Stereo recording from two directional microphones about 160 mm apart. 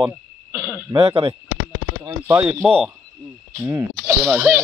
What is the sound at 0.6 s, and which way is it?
Throat clearing, 15° right (ahead or behind).